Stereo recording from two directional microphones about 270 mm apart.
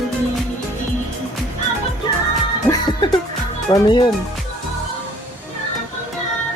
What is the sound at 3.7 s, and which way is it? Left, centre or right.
Speech, centre.